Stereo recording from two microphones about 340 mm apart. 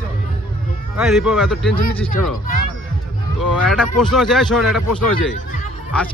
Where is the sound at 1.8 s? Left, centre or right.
Left.